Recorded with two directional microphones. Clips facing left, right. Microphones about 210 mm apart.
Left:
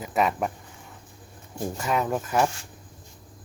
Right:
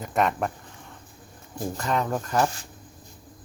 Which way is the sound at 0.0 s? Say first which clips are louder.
Even; 5° left (ahead or behind).